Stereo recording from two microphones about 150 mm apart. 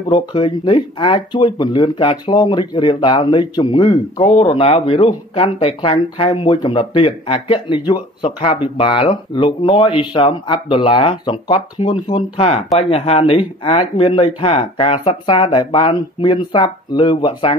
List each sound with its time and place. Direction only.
0.1 s speech: 35° left (ahead or behind)
4.2 s speech: 45° left (ahead or behind)